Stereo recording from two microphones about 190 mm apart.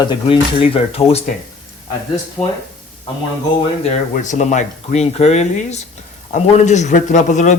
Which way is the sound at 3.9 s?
40° left (ahead or behind).